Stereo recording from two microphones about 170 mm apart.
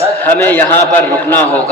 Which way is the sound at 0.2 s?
10° left (ahead or behind).